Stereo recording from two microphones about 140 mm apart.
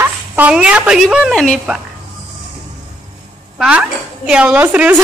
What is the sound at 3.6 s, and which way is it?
Speech, 5° right (ahead or behind).